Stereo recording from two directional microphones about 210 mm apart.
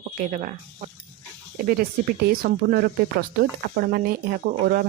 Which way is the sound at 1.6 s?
45° right (ahead or behind).